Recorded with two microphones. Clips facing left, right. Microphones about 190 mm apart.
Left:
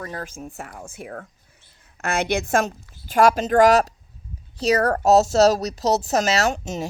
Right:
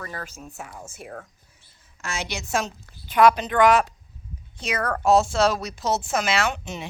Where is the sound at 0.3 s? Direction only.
50° left (ahead or behind).